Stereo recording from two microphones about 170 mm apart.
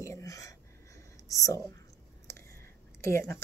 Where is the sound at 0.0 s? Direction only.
20° left (ahead or behind).